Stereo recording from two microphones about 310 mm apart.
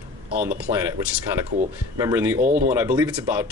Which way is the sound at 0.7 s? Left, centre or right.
Right.